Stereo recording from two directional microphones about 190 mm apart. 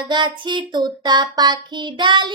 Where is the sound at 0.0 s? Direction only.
25° right (ahead or behind).